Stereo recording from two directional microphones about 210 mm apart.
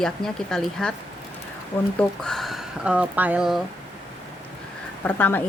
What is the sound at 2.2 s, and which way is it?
A woman's voice, centre (ahead or behind).